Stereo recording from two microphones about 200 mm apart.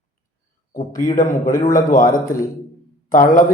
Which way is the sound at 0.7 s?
45° left (ahead or behind).